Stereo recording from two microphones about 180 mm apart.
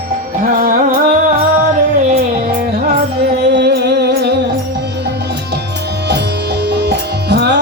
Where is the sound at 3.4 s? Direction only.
70° right (ahead or behind).